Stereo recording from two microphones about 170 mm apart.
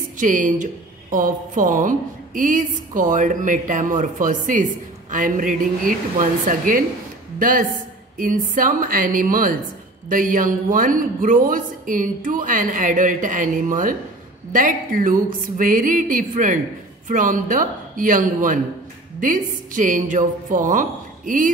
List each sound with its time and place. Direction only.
0.2 s speech: 50° right (ahead or behind)